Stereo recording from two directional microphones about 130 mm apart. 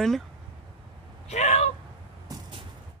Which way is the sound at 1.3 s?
60° left (ahead or behind).